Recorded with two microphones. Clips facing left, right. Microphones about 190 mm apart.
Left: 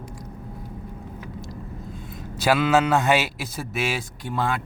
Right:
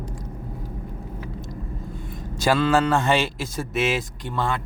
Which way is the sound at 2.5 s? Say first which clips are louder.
Even; 10° left (ahead or behind).